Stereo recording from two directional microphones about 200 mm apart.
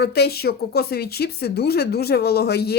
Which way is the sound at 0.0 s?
55° left (ahead or behind).